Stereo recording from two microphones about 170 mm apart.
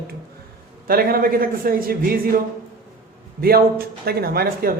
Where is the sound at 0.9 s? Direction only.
60° right (ahead or behind).